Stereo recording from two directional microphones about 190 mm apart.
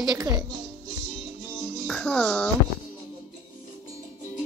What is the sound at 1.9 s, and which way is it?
Fowl, 5° left (ahead or behind).